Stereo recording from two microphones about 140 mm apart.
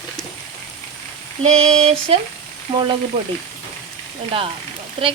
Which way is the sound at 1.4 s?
50° right (ahead or behind).